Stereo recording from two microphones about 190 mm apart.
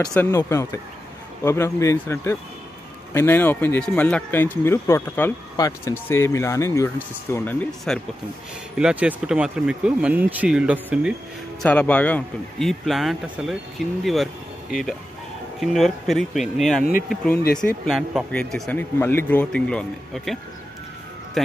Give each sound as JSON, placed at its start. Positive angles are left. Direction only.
{"t": 0.1, "sound": "speech", "side_deg": 10}
{"t": 11.6, "sound": "speech", "side_deg": 5}
{"t": 17.4, "sound": "speech", "side_deg": 50}
{"t": 17.6, "sound": "speech", "side_deg": 0}